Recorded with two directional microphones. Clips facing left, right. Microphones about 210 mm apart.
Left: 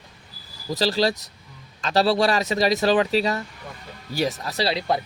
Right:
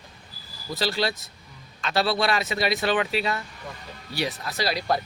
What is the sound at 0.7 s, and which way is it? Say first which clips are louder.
Speech: left 5 dB; 35° left (ahead or behind).